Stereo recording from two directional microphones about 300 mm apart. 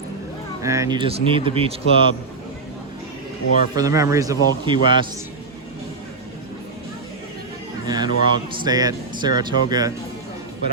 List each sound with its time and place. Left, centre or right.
0.6 s speech: centre
3.8 s speech: centre
7.9 s speech: centre